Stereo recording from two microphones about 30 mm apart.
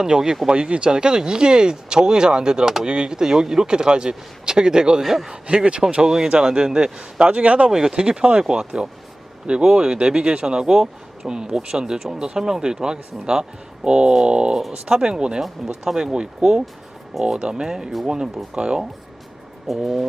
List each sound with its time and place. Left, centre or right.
0.0 s speech: centre
0.5 s speech: right
5.0 s speech: centre
5.3 s a man's voice: right
6.0 s speech: right
6.7 s a man's voice: right
7.7 s speech: centre
7.9 s a man's voice: right
14.8 s speech: centre
19.6 s speech: centre